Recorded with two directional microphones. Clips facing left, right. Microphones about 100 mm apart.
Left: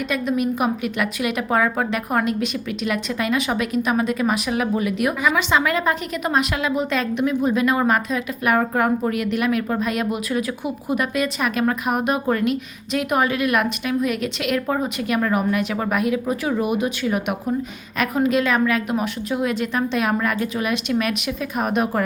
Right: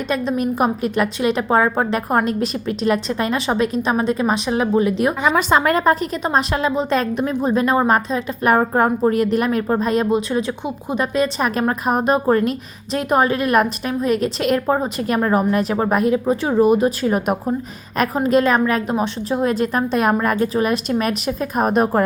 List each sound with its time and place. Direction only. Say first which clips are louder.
0.1 s a woman's voice: right 2 dB; 35° right (ahead or behind)
5.4 s a woman's voice: right 4 dB; 40° right (ahead or behind)